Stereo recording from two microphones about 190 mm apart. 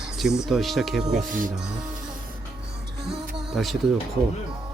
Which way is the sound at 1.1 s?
45° right (ahead or behind).